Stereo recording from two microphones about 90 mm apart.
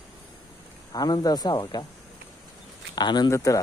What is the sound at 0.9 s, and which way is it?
Speech, 45° left (ahead or behind).